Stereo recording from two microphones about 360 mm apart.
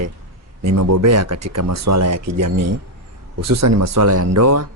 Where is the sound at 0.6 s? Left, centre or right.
Right.